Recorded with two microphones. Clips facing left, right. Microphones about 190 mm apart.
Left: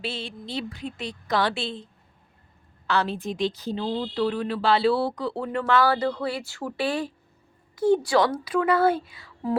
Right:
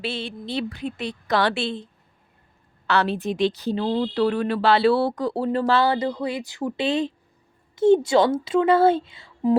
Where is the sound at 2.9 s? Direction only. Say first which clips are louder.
Right 3 dB; 70° right (ahead or behind).